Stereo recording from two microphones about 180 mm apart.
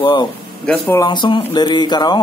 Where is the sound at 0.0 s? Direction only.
25° left (ahead or behind).